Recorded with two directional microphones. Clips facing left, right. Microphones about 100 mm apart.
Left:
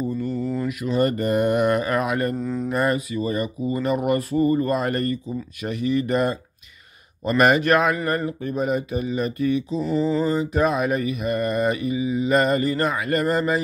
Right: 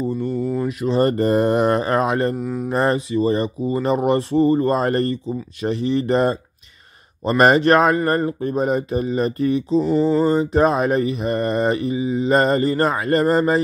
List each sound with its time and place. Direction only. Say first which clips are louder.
0.0 s a sound: right 3 dB; 30° right (ahead or behind)
0.3 s a sound: right 3 dB; centre (ahead or behind)
0.6 s mantra: right 3 dB; 30° right (ahead or behind)
2.3 s a man's voice: right 1 dB; 10° right (ahead or behind)
2.7 s speech: right 5 dB; 30° right (ahead or behind)
7.2 s mantra: right 3 dB; 35° right (ahead or behind)